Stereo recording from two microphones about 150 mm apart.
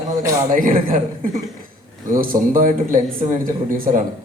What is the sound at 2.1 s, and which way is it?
A woman's voice, 70° right (ahead or behind).